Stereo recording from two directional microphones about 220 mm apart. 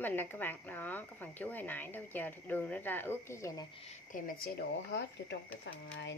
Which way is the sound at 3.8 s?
35° left (ahead or behind).